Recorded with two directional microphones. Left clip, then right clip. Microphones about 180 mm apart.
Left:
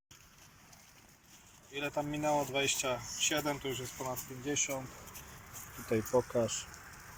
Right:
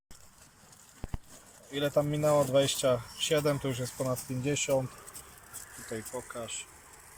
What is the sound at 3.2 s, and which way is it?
Speech, 70° right (ahead or behind).